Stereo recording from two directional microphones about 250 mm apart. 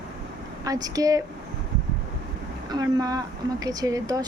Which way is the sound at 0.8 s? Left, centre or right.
Centre.